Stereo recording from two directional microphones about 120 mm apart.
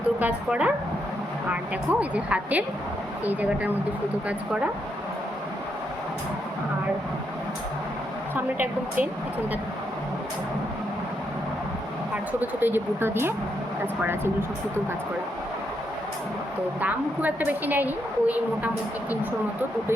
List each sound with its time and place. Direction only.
0.2 s a woman's voice: 10° right (ahead or behind)
1.9 s a woman's voice: 10° right (ahead or behind)
8.5 s a woman's voice: 15° right (ahead or behind)
12.4 s a woman's voice: 15° right (ahead or behind)
16.8 s a woman's voice: 15° right (ahead or behind)